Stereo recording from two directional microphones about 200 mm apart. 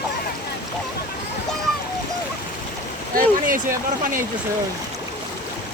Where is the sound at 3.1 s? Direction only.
45° right (ahead or behind).